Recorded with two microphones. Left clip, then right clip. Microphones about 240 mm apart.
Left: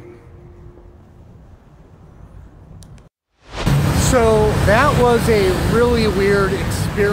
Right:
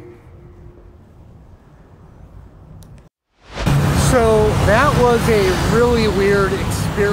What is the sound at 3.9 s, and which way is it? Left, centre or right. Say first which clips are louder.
Speech: even; centre.